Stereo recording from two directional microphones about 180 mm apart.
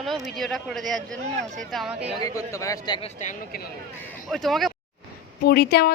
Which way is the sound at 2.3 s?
15° left (ahead or behind).